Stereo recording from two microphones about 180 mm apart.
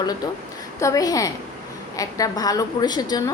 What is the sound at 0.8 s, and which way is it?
A woman's voice, 20° left (ahead or behind).